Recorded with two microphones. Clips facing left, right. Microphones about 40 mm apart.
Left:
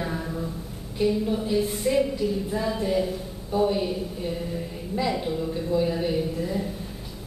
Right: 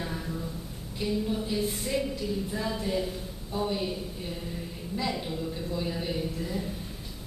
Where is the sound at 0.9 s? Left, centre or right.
Centre.